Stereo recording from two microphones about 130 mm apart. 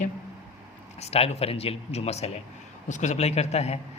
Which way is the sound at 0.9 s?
55° left (ahead or behind).